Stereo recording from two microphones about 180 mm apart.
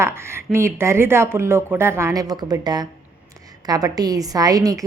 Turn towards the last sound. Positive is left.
turn(degrees=-20)  # may be behind; listen again after turning